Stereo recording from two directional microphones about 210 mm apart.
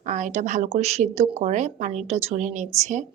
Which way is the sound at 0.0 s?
35° right (ahead or behind).